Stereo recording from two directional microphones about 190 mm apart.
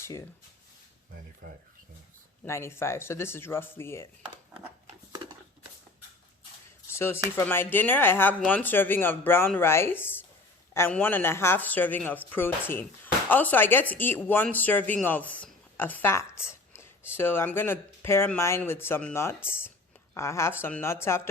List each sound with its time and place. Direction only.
1.4 s speech: 50° right (ahead or behind)
2.4 s speech: 15° left (ahead or behind)
6.9 s speech: 15° left (ahead or behind)